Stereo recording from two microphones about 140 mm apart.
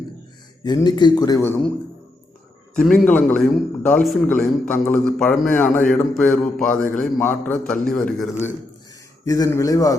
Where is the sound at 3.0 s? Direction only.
10° left (ahead or behind).